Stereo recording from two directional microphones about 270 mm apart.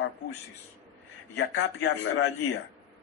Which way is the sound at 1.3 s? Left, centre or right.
Left.